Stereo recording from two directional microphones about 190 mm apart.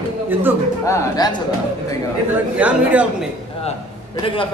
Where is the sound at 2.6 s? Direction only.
5° right (ahead or behind).